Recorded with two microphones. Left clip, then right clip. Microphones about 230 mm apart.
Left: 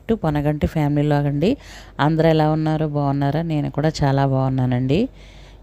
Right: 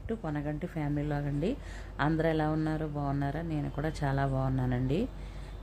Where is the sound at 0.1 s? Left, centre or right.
Left.